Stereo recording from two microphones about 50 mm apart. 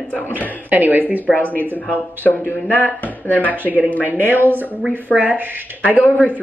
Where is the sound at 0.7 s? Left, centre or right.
Right.